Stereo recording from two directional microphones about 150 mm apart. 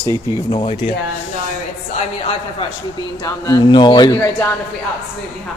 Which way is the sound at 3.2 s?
25° left (ahead or behind).